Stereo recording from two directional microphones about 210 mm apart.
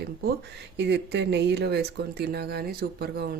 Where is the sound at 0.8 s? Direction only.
55° right (ahead or behind).